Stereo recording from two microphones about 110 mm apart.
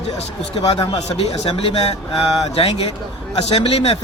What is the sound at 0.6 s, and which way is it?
Speech, 45° left (ahead or behind).